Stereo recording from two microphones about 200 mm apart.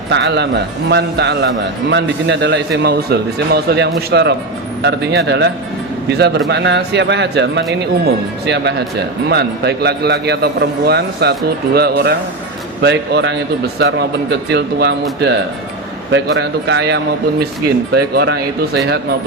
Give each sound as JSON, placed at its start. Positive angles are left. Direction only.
{"t": 0.1, "sound": "speech", "side_deg": -60}
{"t": 16.1, "sound": "speech", "side_deg": -60}